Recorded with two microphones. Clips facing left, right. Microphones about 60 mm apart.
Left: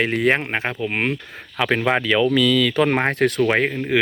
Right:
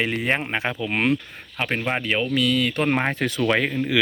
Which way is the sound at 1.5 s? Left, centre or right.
Left.